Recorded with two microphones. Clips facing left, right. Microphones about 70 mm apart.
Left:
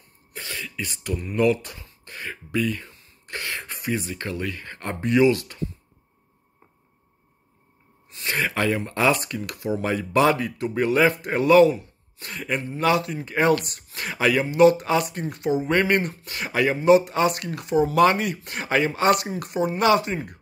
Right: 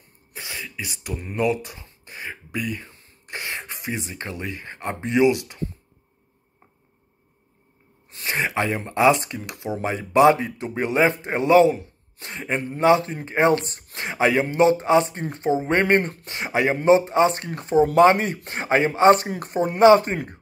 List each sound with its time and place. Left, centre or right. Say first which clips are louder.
0.3 s throat clearing: left 1 dB; centre
1.3 s speech: left 2 dB; centre
8.3 s speech: even; right
16.3 s speech: left 2 dB; right